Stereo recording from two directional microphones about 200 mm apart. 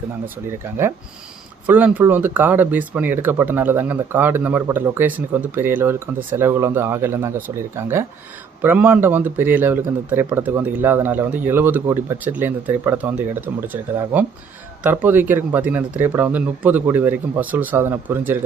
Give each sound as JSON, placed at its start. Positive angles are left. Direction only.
{"t": 1.6, "sound": "a man's voice", "side_deg": -10}
{"t": 14.8, "sound": "a man's voice", "side_deg": -10}